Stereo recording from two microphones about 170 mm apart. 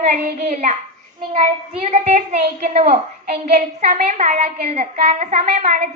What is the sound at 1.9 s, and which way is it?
A woman's voice, 40° right (ahead or behind).